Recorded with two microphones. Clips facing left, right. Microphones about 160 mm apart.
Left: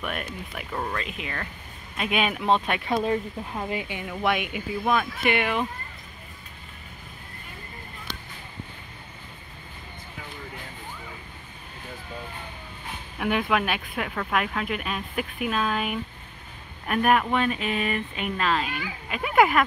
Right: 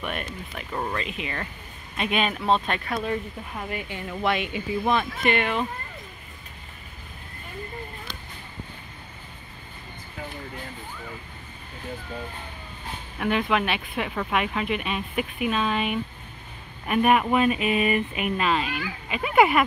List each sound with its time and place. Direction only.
0.0 s speech: 5° left (ahead or behind)
2.9 s speech: 25° left (ahead or behind)
4.0 s speech: 5° left (ahead or behind)
13.2 s speech: 5° left (ahead or behind)